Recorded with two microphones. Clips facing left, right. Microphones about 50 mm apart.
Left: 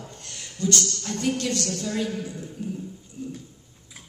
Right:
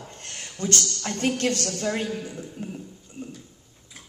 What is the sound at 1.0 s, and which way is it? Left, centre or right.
A man's voice, right.